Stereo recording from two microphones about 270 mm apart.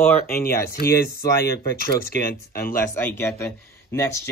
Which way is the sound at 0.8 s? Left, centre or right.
Left.